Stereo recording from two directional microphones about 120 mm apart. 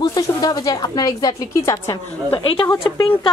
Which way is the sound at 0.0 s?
30° left (ahead or behind).